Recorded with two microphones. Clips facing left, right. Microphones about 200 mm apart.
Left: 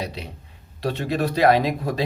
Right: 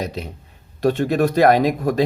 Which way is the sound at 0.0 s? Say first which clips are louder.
Right 4 dB; 45° right (ahead or behind).